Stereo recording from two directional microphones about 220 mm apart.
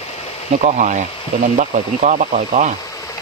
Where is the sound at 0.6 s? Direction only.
35° right (ahead or behind).